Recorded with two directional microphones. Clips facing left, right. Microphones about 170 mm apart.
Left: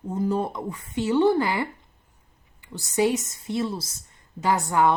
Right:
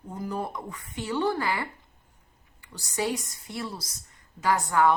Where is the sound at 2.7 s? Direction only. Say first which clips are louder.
Left 7 dB; 20° left (ahead or behind).